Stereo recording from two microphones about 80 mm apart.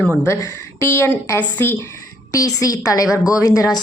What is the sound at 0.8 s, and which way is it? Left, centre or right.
Speech, left.